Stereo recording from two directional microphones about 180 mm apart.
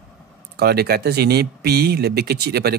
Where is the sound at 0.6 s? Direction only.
60° right (ahead or behind).